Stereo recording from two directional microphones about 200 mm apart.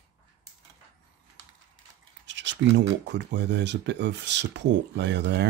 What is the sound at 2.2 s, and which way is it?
Speech, 65° right (ahead or behind).